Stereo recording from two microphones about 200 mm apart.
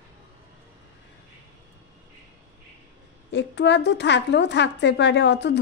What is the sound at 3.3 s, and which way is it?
A woman's voice, 60° left (ahead or behind).